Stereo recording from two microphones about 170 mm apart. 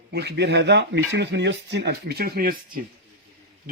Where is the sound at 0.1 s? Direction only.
75° right (ahead or behind).